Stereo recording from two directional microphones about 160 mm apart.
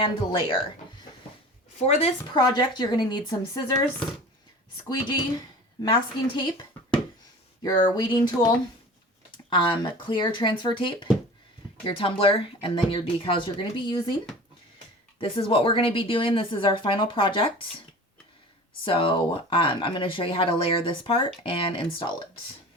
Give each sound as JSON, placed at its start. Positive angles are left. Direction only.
{"t": 0.0, "sound": "speech", "side_deg": 30}
{"t": 1.8, "sound": "speech", "side_deg": 40}
{"t": 2.3, "sound": "a woman's voice", "side_deg": 25}
{"t": 4.9, "sound": "a woman's voice", "side_deg": 25}
{"t": 15.2, "sound": "speech", "side_deg": 35}
{"t": 18.9, "sound": "speech", "side_deg": 35}